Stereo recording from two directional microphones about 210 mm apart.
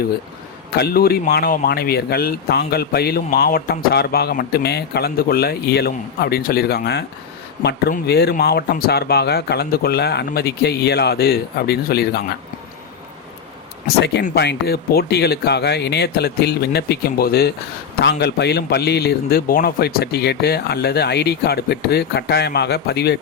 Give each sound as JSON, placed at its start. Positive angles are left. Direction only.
{"t": 0.8, "sound": "speech", "side_deg": 50}
{"t": 13.8, "sound": "speech", "side_deg": 55}